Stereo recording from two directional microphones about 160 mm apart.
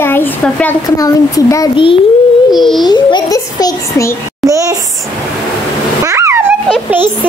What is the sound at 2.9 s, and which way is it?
A child's voice, 25° left (ahead or behind).